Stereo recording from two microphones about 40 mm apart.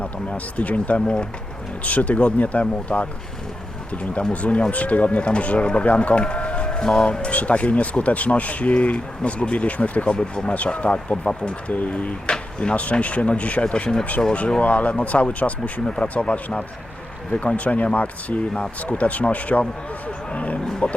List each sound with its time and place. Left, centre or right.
0.0 s speech: left
10.1 s speech: left
11.7 s speech: left
12.2 s a sound: left
12.7 s speech: left
14.2 s speech: left
14.6 s speech: left
18.5 s speech: left
18.9 s speech: left
20.3 s a sound: left
20.8 s speech: left